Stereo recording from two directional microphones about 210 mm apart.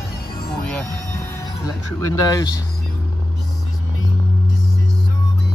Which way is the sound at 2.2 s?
20° left (ahead or behind).